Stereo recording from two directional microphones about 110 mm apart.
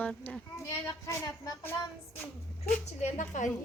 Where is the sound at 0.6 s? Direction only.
25° left (ahead or behind).